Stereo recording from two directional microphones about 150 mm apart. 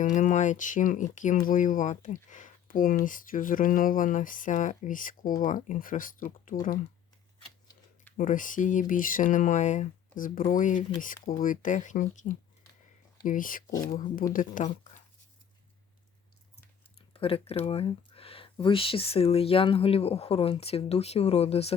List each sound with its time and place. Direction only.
0.0 s speech: 55° left (ahead or behind)
8.1 s speech: 60° left (ahead or behind)
17.2 s speech: 40° left (ahead or behind)